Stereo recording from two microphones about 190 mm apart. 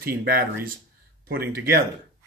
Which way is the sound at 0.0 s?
55° right (ahead or behind).